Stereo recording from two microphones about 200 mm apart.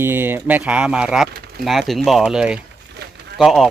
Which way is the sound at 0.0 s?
10° right (ahead or behind).